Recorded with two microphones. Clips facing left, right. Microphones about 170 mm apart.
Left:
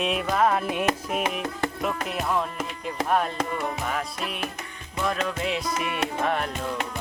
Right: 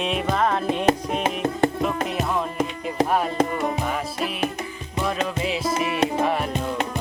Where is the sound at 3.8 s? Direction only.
Centre (ahead or behind).